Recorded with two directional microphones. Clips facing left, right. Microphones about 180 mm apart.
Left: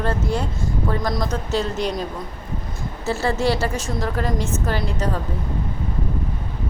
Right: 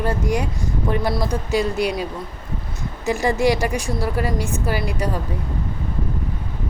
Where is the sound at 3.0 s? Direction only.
15° right (ahead or behind).